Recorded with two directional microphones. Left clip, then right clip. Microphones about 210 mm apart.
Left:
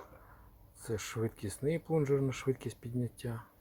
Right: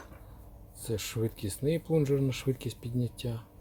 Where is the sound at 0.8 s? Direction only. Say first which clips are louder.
Right 3 dB; 5° left (ahead or behind).